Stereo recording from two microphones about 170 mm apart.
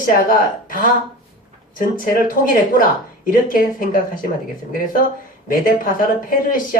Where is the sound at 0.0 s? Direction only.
55° left (ahead or behind).